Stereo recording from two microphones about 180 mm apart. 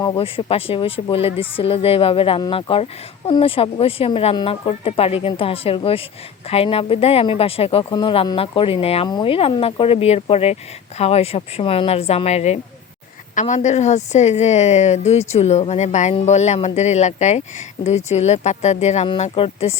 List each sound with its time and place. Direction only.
0.0 s speech: 25° left (ahead or behind)